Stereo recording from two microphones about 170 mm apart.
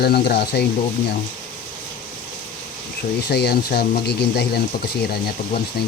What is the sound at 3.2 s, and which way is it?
Speech, 70° left (ahead or behind).